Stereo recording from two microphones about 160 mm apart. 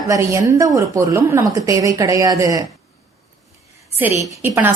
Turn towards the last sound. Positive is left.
turn(degrees=-10)  # may be behind; listen again after turning